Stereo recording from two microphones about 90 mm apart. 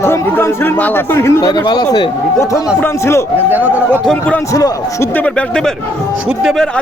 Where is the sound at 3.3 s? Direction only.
20° right (ahead or behind).